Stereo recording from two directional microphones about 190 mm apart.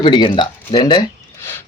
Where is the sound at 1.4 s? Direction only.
10° left (ahead or behind).